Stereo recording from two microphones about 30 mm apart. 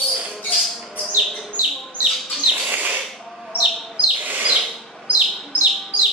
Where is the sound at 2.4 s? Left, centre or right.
Right.